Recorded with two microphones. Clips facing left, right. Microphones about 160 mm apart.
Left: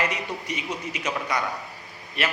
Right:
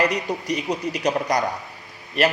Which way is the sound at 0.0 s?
35° right (ahead or behind).